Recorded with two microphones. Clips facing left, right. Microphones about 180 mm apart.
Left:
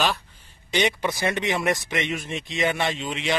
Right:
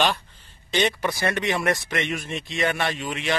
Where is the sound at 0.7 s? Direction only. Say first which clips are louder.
Even; 15° left (ahead or behind).